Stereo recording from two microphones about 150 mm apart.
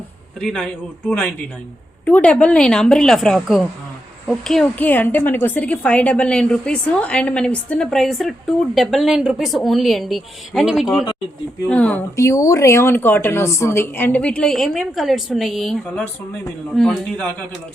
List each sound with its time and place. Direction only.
0.3 s a woman's voice: 5° left (ahead or behind)
12.1 s a woman's voice: 20° left (ahead or behind); by 17.2 s 5° left (ahead or behind)